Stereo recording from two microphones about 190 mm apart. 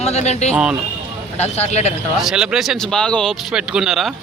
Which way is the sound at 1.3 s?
35° left (ahead or behind).